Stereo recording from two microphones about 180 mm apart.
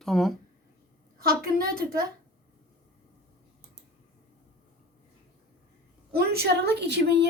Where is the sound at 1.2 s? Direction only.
55° right (ahead or behind).